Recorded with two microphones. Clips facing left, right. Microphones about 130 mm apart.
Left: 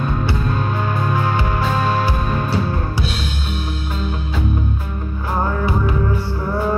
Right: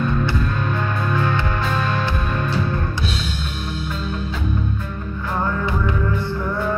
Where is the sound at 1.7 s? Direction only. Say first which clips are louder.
Left 5 dB; 35° left (ahead or behind).